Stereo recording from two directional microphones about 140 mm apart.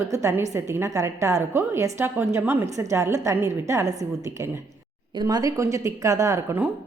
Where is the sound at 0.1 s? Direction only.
20° right (ahead or behind).